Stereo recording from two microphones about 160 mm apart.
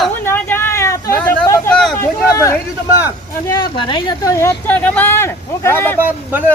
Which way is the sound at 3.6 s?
30° left (ahead or behind).